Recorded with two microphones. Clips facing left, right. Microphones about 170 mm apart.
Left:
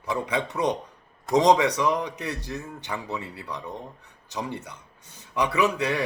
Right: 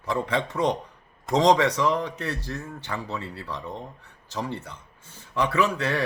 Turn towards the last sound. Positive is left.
turn(degrees=15)  # may be behind; listen again after turning